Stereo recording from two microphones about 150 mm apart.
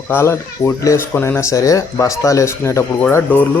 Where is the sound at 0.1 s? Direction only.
15° left (ahead or behind).